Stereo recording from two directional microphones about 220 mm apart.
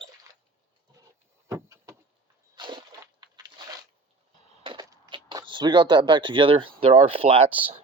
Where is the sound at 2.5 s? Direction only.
20° right (ahead or behind).